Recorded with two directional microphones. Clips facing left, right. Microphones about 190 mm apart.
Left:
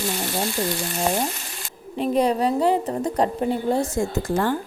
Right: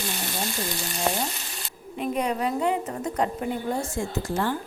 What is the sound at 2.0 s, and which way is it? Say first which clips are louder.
A woman's voice: left 6 dB; 35° left (ahead or behind).